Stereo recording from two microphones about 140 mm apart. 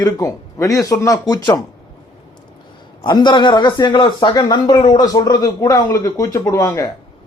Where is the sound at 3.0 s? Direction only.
35° left (ahead or behind).